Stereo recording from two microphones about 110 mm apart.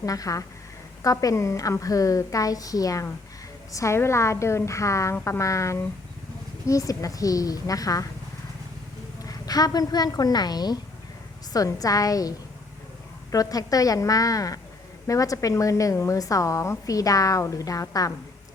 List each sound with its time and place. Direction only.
0.0 s a woman's voice: 30° left (ahead or behind)
9.2 s a woman's voice: 35° left (ahead or behind)
13.3 s a woman's voice: 35° left (ahead or behind)